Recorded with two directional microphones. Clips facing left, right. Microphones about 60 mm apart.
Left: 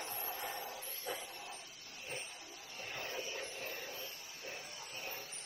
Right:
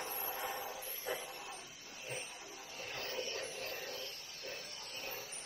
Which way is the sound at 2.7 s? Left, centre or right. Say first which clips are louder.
Right 1 dB; centre.